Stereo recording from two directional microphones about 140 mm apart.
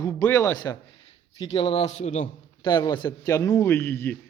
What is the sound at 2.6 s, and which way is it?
A man's voice, 35° left (ahead or behind).